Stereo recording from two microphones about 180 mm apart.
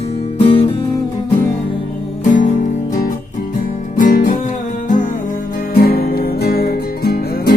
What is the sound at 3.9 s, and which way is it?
Music, 45° left (ahead or behind).